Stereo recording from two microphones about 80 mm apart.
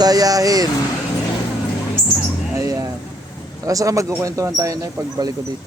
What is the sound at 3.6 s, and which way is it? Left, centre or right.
Speech, right.